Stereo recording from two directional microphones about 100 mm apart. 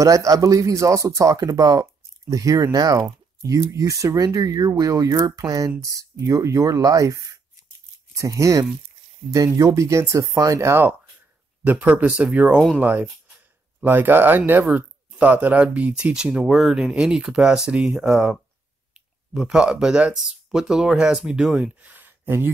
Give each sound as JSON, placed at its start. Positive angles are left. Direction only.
{"t": 0.0, "sound": "speech", "side_deg": -35}
{"t": 8.2, "sound": "speech", "side_deg": -30}
{"t": 21.7, "sound": "a sound", "side_deg": -15}